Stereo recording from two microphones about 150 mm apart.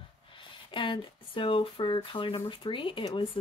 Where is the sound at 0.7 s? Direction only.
35° left (ahead or behind).